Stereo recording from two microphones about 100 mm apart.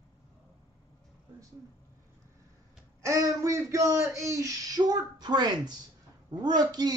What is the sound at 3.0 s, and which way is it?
Speech, 35° right (ahead or behind).